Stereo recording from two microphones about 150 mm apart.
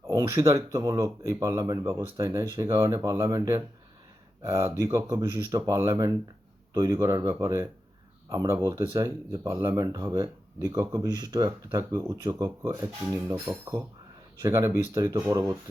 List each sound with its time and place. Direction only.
0.0 s speech: 20° right (ahead or behind)